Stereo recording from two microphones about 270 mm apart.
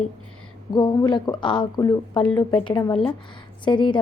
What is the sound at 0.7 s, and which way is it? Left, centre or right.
A woman's voice, centre.